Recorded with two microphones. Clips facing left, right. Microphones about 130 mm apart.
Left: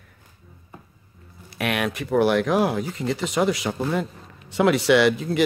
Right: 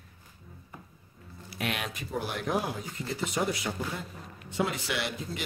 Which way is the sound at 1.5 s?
70° left (ahead or behind).